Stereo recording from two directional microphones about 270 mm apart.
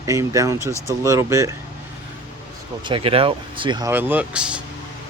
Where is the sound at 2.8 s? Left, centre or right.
Centre.